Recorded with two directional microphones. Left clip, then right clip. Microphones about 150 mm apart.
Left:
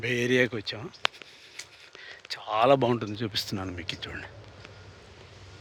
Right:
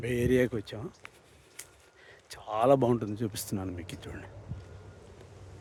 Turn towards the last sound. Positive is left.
turn(degrees=-25)  # may be behind; listen again after turning